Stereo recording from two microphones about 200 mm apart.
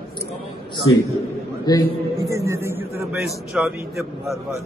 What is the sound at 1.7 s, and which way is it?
Speech, 15° left (ahead or behind).